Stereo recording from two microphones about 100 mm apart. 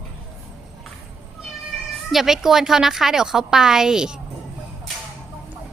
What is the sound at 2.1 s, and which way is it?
A woman's voice, centre (ahead or behind).